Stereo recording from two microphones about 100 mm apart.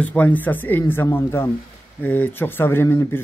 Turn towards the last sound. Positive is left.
turn(degrees=25)  # may be behind; listen again after turning